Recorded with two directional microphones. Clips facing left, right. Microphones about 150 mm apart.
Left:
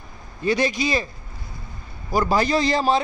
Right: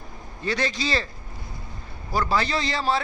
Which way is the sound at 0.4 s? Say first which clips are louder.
Left 5 dB; 15° left (ahead or behind).